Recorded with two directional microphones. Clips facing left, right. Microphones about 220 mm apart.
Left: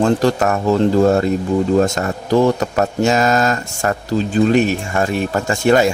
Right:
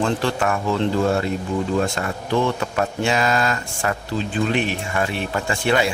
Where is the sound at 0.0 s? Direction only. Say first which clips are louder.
Left 6 dB; 40° left (ahead or behind).